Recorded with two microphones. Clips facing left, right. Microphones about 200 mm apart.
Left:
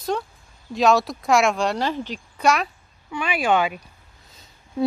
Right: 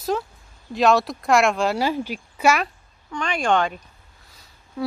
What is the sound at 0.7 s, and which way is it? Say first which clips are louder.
A woman's voice: even; centre (ahead or behind).